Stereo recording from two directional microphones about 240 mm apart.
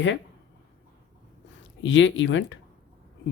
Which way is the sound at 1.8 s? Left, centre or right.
Left.